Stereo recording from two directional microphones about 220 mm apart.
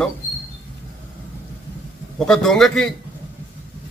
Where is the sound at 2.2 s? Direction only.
5° left (ahead or behind).